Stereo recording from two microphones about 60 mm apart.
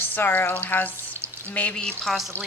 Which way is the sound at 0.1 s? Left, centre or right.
Left.